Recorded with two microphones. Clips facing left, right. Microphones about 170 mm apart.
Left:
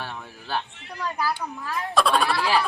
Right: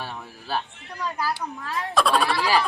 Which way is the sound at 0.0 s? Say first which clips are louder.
Even; 5° right (ahead or behind).